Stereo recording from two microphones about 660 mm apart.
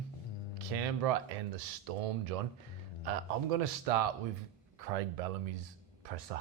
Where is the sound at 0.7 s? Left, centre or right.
Right.